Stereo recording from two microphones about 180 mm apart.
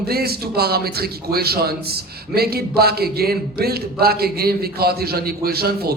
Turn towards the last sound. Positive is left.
turn(degrees=-60)  # may be behind; listen again after turning